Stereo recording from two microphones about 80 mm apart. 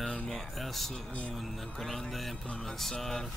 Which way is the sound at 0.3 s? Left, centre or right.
Centre.